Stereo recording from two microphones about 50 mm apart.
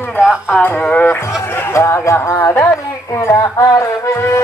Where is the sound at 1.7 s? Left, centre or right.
Left.